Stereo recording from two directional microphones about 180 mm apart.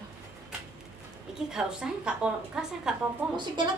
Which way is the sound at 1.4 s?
5° right (ahead or behind).